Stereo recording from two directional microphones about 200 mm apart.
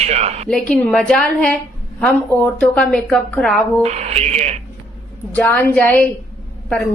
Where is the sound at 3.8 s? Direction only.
35° right (ahead or behind).